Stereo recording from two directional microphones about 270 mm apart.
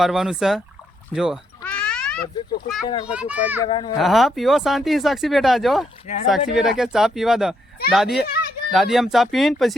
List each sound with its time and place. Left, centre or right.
0.0 s speech: centre
1.1 s cat: centre
3.1 s speech: centre
3.6 s a child's voice: centre
3.9 s speech: centre